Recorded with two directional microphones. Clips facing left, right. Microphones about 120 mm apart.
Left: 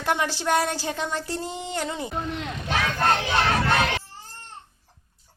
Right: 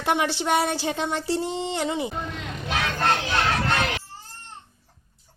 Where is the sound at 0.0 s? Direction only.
20° right (ahead or behind).